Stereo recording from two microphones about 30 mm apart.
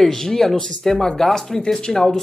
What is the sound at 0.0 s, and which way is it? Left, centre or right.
Speech, centre.